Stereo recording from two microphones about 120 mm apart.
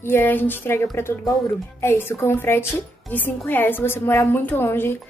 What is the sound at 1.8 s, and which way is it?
A woman's voice, 20° left (ahead or behind).